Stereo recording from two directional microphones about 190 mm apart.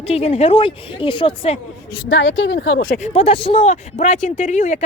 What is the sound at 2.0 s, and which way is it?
Speech, 75° left (ahead or behind).